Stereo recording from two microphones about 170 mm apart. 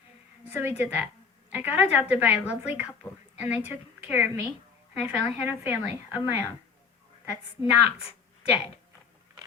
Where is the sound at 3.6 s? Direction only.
10° right (ahead or behind).